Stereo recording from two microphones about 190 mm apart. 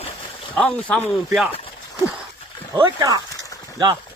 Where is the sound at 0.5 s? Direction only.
5° left (ahead or behind).